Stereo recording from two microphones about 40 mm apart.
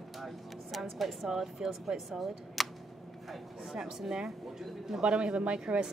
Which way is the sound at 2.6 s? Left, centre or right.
Centre.